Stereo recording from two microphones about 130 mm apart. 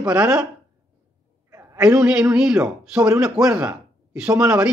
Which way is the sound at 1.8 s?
5° right (ahead or behind).